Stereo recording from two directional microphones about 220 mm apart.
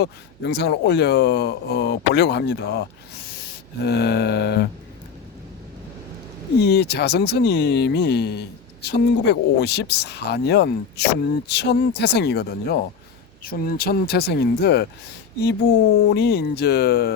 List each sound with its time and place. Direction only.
0.0 s speech: 50° left (ahead or behind)
3.8 s speech: 50° left (ahead or behind)
6.6 s speech: 50° left (ahead or behind)
16.0 s speech: 45° left (ahead or behind)